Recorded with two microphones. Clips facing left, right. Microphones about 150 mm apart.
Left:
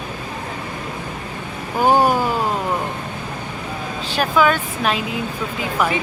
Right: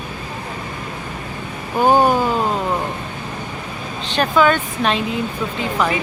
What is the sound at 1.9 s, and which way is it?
Speech, 10° left (ahead or behind).